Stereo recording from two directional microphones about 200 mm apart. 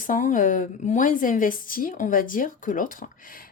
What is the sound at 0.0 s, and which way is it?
A woman's voice, 40° left (ahead or behind).